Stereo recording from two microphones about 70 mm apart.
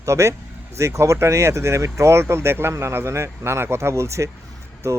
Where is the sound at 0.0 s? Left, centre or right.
Right.